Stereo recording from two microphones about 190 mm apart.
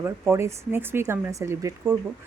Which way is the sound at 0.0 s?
15° right (ahead or behind).